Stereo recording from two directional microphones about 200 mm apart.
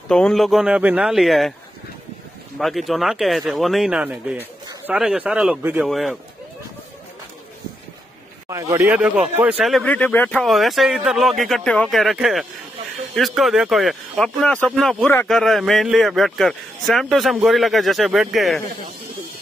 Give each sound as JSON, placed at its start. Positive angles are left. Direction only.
{"t": 0.1, "sound": "a man's voice", "side_deg": 5}
{"t": 2.6, "sound": "a man's voice", "side_deg": 0}
{"t": 8.5, "sound": "a man's voice", "side_deg": -15}